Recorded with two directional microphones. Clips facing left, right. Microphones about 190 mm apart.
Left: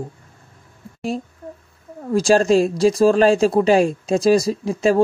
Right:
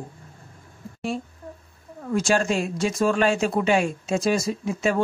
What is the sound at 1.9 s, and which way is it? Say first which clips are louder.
Speech: left 6 dB; 35° left (ahead or behind).